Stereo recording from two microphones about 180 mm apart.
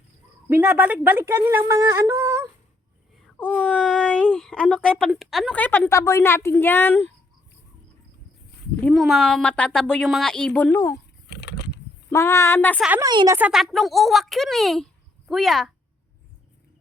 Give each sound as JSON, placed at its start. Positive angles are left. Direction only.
{"t": 0.4, "sound": "speech", "side_deg": -10}
{"t": 3.3, "sound": "speech", "side_deg": 10}
{"t": 8.8, "sound": "speech", "side_deg": 0}
{"t": 11.3, "sound": "a sound", "side_deg": 70}
{"t": 12.1, "sound": "speech", "side_deg": 15}
{"t": 13.0, "sound": "speech", "side_deg": -20}
{"t": 13.3, "sound": "speech", "side_deg": -5}